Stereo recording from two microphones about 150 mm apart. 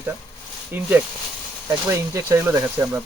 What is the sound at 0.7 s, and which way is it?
Speech, 10° right (ahead or behind).